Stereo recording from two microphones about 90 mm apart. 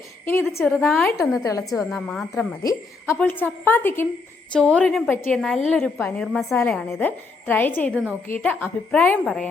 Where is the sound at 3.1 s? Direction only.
20° left (ahead or behind).